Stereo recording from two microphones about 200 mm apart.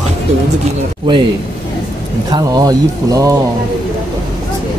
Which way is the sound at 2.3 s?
20° right (ahead or behind).